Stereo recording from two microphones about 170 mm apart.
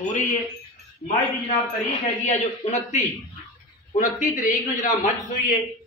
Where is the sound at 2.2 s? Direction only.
40° left (ahead or behind).